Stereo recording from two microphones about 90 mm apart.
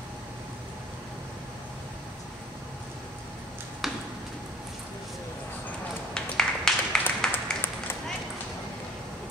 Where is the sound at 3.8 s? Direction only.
5° right (ahead or behind).